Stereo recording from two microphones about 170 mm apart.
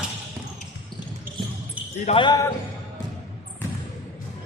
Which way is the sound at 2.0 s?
30° left (ahead or behind).